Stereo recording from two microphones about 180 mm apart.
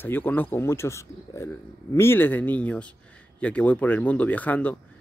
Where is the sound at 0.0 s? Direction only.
10° left (ahead or behind).